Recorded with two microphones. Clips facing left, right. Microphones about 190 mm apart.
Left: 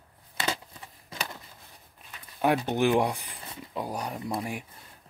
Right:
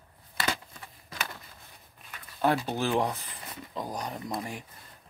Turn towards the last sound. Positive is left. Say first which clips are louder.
# left 3 dB
turn(degrees=10)  # may be behind; listen again after turning